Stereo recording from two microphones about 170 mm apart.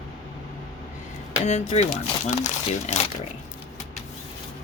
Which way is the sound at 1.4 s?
40° left (ahead or behind).